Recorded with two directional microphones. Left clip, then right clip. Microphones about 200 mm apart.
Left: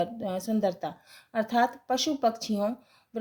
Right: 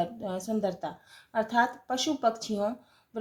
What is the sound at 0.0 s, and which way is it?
A woman's voice, 40° left (ahead or behind).